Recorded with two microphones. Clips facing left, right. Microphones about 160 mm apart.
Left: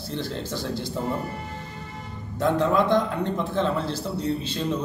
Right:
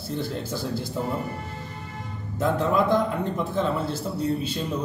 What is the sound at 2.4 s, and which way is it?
A man's voice, 5° right (ahead or behind).